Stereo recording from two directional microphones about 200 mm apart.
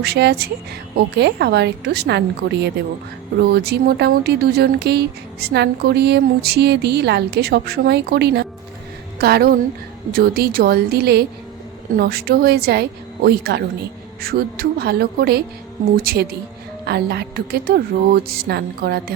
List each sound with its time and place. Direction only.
0.0 s a woman's voice: 55° right (ahead or behind)